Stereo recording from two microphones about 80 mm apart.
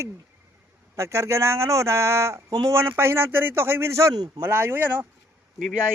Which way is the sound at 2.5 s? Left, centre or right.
Right.